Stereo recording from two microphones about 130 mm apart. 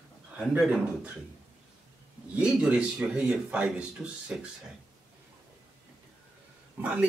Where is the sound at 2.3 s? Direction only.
5° right (ahead or behind).